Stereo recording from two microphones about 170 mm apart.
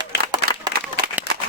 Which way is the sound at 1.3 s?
75° left (ahead or behind).